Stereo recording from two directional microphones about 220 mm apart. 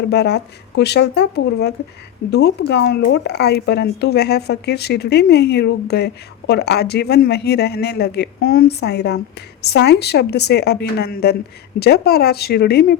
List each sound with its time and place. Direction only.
0.1 s speech: 50° left (ahead or behind)